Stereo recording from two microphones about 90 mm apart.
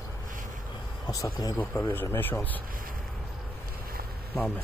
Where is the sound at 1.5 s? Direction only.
25° left (ahead or behind).